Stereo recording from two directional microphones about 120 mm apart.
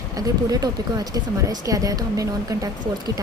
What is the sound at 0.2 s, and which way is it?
Speech, 30° right (ahead or behind).